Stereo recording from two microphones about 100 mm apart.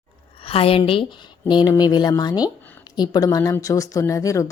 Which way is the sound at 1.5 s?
50° left (ahead or behind).